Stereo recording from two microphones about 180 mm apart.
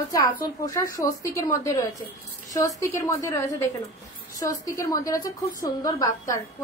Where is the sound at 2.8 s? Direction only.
15° left (ahead or behind).